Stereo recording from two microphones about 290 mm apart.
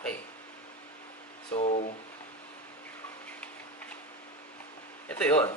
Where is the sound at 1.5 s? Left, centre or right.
Left.